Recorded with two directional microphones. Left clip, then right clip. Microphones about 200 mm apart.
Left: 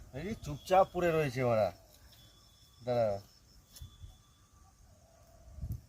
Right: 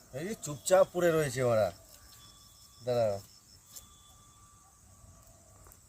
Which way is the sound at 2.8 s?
10° right (ahead or behind).